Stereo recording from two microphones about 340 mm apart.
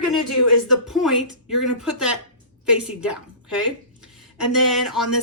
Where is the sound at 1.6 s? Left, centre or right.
Centre.